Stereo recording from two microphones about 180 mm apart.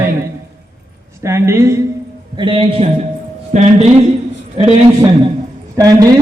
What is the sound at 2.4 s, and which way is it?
A man's voice, 30° right (ahead or behind).